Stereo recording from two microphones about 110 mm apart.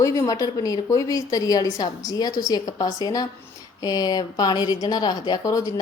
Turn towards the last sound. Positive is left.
turn(degrees=30)  # may be behind; listen again after turning